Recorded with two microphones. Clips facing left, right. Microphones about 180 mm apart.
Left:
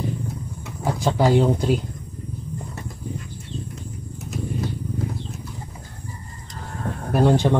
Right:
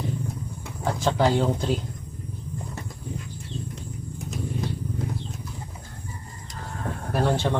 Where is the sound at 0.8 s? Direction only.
10° left (ahead or behind).